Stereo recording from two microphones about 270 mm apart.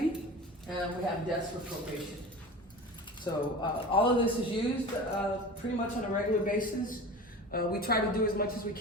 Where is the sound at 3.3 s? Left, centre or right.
Centre.